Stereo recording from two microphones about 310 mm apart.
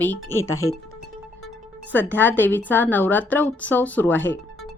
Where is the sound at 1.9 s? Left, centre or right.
Centre.